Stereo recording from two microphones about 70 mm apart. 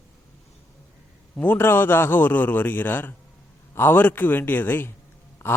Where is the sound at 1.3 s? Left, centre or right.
Left.